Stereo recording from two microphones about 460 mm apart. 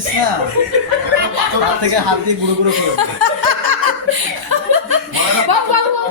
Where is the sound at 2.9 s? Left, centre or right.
Right.